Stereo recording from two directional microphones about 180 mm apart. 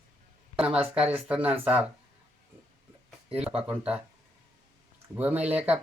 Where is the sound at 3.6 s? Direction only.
5° right (ahead or behind).